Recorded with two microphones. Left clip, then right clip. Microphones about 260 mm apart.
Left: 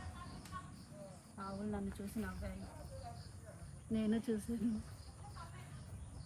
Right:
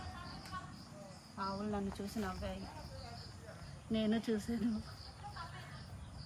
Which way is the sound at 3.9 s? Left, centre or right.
Right.